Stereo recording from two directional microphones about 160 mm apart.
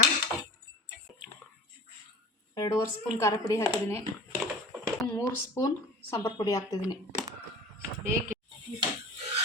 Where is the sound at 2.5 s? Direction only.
25° left (ahead or behind).